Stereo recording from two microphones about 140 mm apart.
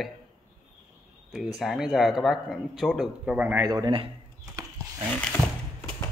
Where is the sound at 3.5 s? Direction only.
25° right (ahead or behind).